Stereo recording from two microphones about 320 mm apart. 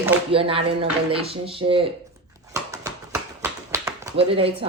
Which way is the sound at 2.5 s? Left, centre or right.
Centre.